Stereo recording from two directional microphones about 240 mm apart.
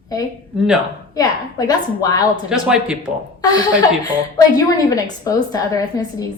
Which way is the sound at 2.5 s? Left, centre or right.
Centre.